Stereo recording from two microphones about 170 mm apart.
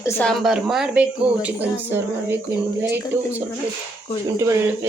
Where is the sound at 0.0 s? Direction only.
5° left (ahead or behind); by 2.4 s 10° right (ahead or behind).